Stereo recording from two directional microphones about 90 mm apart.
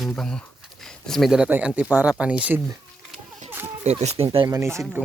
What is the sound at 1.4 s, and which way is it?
Speech, 15° right (ahead or behind).